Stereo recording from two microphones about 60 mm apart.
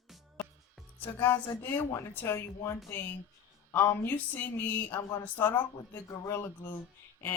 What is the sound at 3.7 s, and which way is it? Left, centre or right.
Speech, left.